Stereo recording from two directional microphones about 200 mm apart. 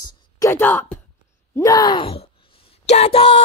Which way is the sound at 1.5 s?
20° left (ahead or behind).